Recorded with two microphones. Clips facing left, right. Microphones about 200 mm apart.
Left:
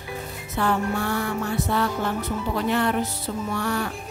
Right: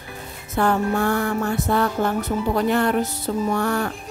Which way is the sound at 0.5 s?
45° right (ahead or behind).